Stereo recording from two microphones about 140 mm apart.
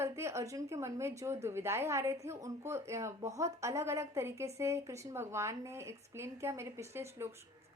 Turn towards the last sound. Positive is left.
turn(degrees=-20)  # may be behind; listen again after turning